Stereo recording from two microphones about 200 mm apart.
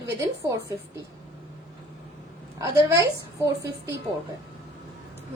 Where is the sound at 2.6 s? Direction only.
15° right (ahead or behind).